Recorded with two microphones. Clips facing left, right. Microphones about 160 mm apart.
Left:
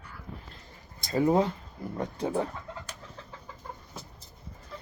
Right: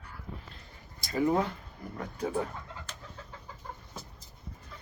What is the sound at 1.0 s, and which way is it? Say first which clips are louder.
Speech: left 3 dB; 30° left (ahead or behind).